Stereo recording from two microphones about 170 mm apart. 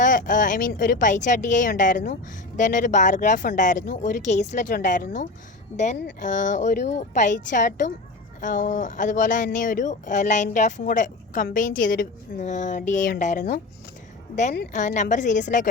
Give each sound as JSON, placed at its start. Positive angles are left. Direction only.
{"t": 0.0, "sound": "speech", "side_deg": 50}
{"t": 14.7, "sound": "speech", "side_deg": 45}